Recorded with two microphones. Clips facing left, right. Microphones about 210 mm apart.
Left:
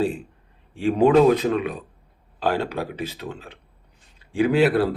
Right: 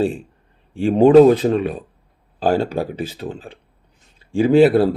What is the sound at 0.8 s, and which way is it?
Speech, 30° right (ahead or behind).